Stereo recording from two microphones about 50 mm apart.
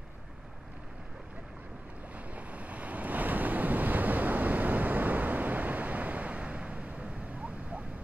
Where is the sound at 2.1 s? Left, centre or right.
Right.